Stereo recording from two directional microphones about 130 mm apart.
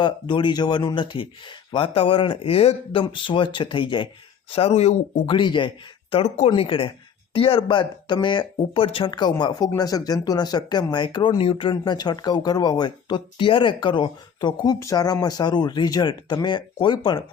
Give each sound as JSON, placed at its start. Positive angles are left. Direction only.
{"t": 0.0, "sound": "speech", "side_deg": 40}
{"t": 4.5, "sound": "speech", "side_deg": 50}
{"t": 5.2, "sound": "speech", "side_deg": 40}